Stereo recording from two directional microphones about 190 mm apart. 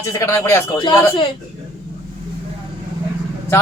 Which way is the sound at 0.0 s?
15° left (ahead or behind).